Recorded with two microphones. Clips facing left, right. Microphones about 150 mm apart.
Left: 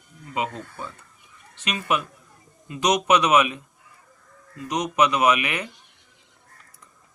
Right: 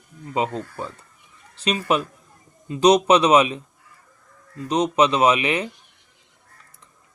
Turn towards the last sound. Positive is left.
turn(degrees=-25)  # may be behind; listen again after turning